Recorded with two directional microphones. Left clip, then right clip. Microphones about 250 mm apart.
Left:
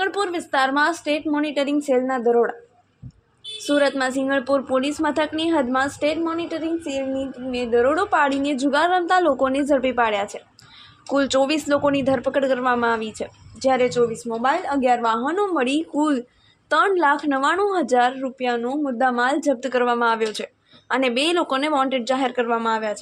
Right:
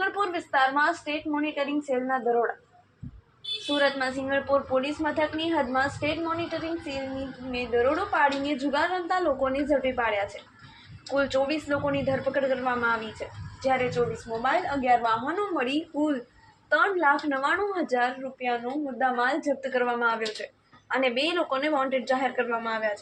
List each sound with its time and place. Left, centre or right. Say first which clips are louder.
0.2 s a woman's voice: left 1 dB; left
3.8 s a woman's voice: left 6 dB; left